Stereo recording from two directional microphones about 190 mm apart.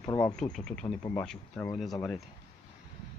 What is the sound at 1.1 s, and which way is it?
Speech, 10° left (ahead or behind).